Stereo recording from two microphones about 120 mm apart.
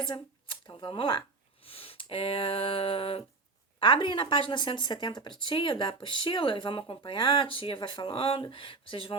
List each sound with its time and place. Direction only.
0.1 s a woman's voice: 40° left (ahead or behind)